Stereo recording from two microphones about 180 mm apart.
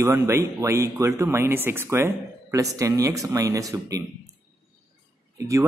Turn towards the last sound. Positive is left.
turn(degrees=-15)  # may be behind; listen again after turning